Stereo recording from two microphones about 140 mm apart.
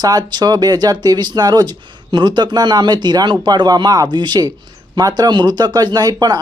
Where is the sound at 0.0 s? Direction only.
30° right (ahead or behind).